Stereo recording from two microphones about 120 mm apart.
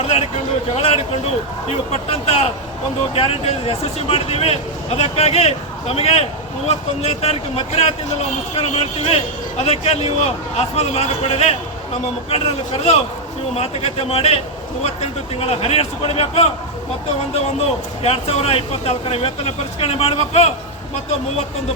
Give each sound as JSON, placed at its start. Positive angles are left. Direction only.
{"t": 0.0, "sound": "a sound", "side_deg": 55}
{"t": 0.8, "sound": "speech", "side_deg": 55}
{"t": 18.0, "sound": "speech", "side_deg": 55}